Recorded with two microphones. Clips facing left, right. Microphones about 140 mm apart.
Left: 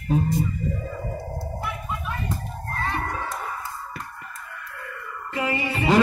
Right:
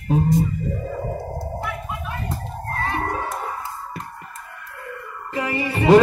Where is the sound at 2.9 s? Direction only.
40° right (ahead or behind).